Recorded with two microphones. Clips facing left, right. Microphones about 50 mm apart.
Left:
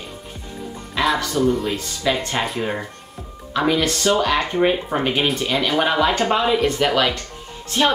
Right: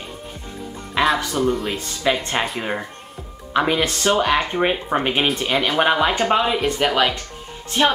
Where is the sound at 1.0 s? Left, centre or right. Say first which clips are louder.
Right 2 dB; right.